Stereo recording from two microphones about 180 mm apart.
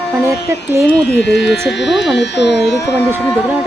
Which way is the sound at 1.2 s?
75° left (ahead or behind).